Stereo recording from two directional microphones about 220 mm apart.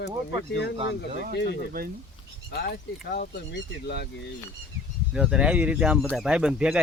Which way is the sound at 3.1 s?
45° left (ahead or behind).